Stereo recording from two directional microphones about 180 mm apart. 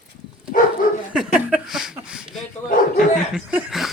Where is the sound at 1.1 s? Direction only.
5° right (ahead or behind).